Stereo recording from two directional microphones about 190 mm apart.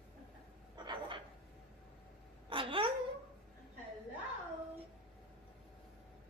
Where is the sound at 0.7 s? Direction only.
25° right (ahead or behind).